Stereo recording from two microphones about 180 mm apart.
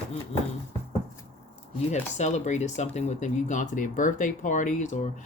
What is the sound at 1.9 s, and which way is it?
Speech, 40° left (ahead or behind).